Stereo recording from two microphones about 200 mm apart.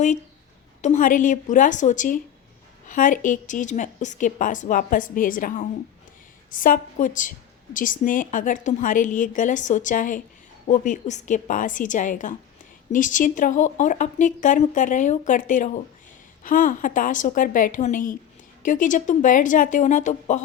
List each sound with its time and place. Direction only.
0.8 s a woman's voice: 40° left (ahead or behind)